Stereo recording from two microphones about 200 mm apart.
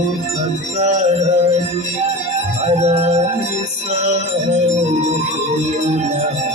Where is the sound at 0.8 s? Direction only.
35° right (ahead or behind).